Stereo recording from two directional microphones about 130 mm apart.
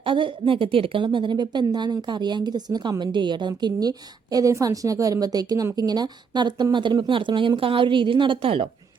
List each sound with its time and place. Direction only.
0.0 s a woman's voice: 40° right (ahead or behind)